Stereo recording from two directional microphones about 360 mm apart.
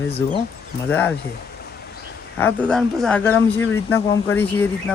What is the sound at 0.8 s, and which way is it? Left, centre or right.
Speech, centre.